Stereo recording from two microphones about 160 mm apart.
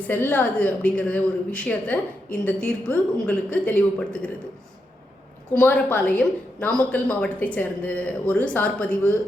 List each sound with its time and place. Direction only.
0.1 s a woman's voice: 10° left (ahead or behind)
5.5 s a woman's voice: 10° left (ahead or behind)